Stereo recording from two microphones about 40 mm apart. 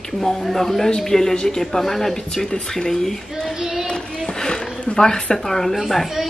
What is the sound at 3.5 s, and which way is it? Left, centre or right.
Child singing, centre.